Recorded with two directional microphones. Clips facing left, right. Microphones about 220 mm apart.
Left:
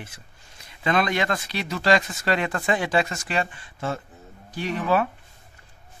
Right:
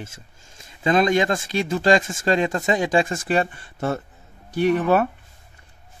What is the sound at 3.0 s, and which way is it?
Speech, 30° right (ahead or behind).